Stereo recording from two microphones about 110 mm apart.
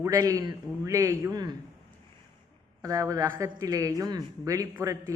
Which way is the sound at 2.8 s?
30° right (ahead or behind).